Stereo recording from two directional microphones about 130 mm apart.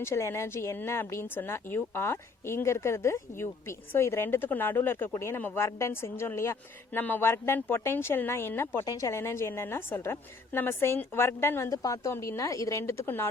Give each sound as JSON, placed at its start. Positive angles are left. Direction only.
{"t": 0.0, "sound": "speech", "side_deg": 20}